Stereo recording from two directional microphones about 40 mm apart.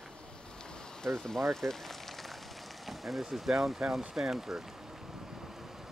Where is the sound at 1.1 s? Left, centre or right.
Centre.